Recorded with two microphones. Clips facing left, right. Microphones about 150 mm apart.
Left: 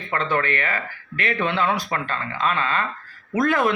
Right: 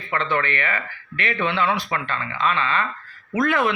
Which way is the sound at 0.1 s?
45° left (ahead or behind).